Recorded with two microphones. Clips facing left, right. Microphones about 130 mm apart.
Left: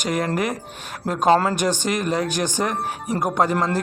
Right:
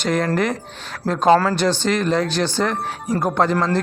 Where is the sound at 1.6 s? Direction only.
15° left (ahead or behind).